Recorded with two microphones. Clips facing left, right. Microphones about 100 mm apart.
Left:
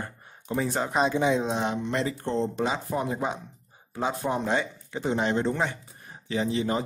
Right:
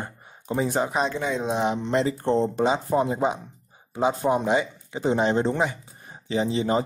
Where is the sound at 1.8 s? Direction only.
30° right (ahead or behind).